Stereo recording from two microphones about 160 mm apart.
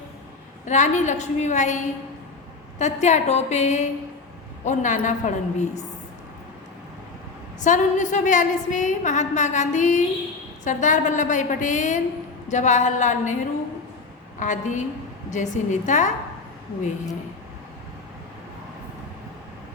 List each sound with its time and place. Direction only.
0.6 s a woman's voice: 50° left (ahead or behind)
7.6 s a woman's voice: 50° left (ahead or behind)